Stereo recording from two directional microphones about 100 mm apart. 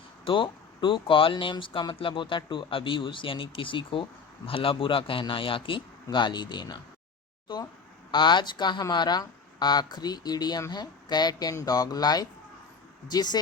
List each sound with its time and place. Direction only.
0.3 s speech: 55° left (ahead or behind)